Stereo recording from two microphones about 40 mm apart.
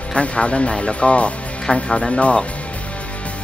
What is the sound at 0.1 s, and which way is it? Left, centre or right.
Speech, left.